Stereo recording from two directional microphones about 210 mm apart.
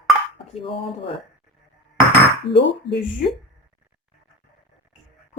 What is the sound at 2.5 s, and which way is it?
Speech, 55° left (ahead or behind).